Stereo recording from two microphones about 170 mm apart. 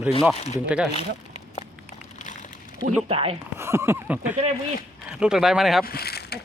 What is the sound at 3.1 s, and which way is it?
Speech, 35° right (ahead or behind).